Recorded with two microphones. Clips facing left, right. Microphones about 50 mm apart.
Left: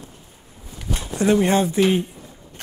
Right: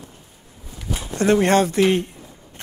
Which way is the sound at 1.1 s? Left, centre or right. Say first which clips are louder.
Right 1 dB; right.